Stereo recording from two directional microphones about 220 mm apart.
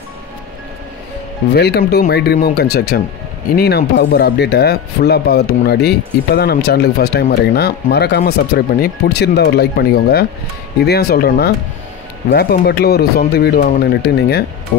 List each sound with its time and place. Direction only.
1.5 s speech: 45° left (ahead or behind)